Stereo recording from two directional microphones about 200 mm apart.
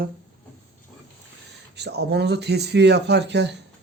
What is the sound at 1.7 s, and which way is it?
Speech, 55° right (ahead or behind).